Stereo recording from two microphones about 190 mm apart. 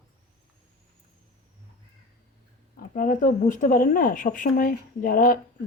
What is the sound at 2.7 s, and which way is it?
Speech, 45° left (ahead or behind).